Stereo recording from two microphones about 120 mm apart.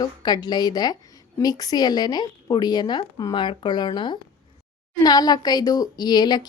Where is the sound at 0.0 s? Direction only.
35° left (ahead or behind).